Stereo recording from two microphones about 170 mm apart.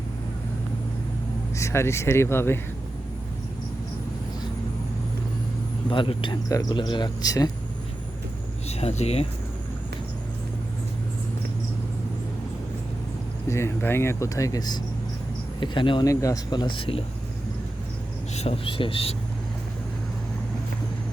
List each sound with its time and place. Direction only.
1.5 s speech: 15° left (ahead or behind)
5.9 s speech: 30° left (ahead or behind)
8.8 s speech: 40° left (ahead or behind)
13.5 s speech: 15° left (ahead or behind); by 17.0 s 30° left (ahead or behind)
18.3 s speech: 35° left (ahead or behind)